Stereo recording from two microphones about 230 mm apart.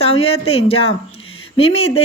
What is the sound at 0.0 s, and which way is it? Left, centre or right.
Speech, left.